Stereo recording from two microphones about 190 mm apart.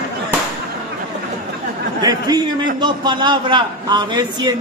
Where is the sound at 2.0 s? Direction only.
20° right (ahead or behind).